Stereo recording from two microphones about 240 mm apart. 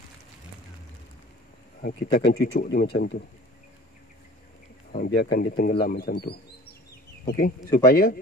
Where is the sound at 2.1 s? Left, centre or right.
Left.